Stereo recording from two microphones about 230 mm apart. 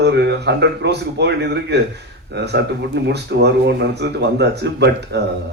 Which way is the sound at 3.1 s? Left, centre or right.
Right.